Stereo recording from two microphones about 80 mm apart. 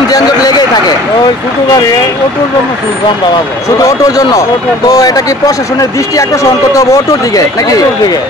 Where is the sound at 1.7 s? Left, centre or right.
Left.